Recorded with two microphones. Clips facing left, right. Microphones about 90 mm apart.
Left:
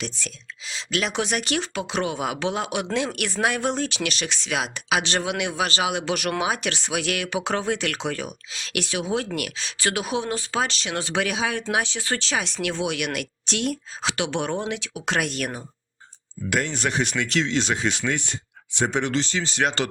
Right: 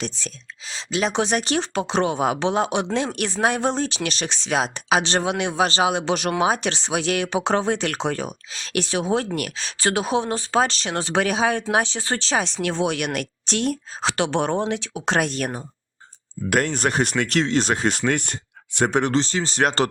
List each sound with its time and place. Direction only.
0.0 s speech: 35° right (ahead or behind)
16.5 s speech: 45° right (ahead or behind)